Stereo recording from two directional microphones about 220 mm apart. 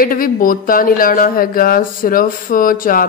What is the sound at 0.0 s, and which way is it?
Speech, 40° left (ahead or behind).